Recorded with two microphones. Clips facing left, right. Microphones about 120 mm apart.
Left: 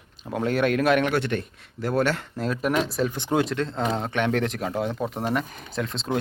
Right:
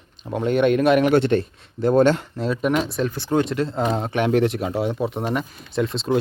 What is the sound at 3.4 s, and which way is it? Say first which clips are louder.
A man's voice: right 5 dB; centre (ahead or behind).